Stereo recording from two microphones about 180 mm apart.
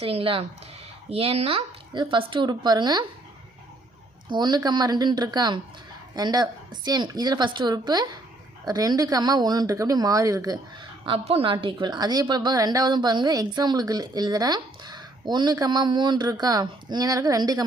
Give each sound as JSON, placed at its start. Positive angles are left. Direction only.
{"t": 0.0, "sound": "a woman's voice", "side_deg": -30}
{"t": 4.3, "sound": "a woman's voice", "side_deg": -25}
{"t": 11.0, "sound": "a woman's voice", "side_deg": -30}